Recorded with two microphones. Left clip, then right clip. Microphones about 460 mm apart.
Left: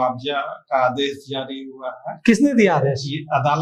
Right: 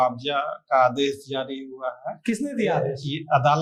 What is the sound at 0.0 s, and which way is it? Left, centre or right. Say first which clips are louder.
Speech: left 1 dB; right.